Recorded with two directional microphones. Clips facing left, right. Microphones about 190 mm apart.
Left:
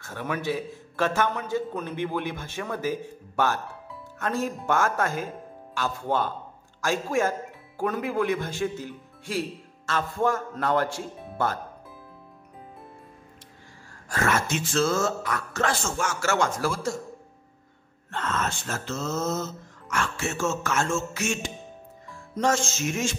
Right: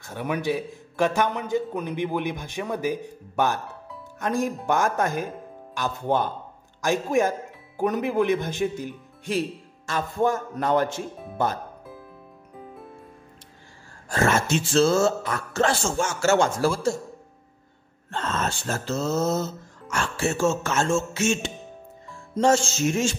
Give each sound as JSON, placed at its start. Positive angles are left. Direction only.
{"t": 0.0, "sound": "a man's voice", "side_deg": -15}
{"t": 14.0, "sound": "speech", "side_deg": -25}
{"t": 18.1, "sound": "music", "side_deg": -30}